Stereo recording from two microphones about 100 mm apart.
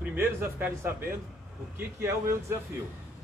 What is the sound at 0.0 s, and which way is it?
A man's voice, 20° right (ahead or behind).